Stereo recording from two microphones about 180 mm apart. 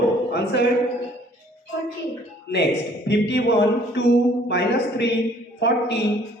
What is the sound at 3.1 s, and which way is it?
A man's voice, 70° left (ahead or behind).